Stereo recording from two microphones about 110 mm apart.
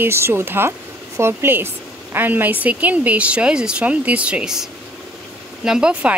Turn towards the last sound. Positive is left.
turn(degrees=-10)  # may be behind; listen again after turning